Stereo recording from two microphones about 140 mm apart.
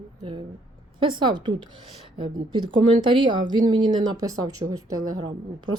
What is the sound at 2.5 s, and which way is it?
A woman's voice, 35° right (ahead or behind).